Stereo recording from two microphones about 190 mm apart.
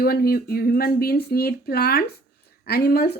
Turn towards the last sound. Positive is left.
turn(degrees=60)  # may be behind; listen again after turning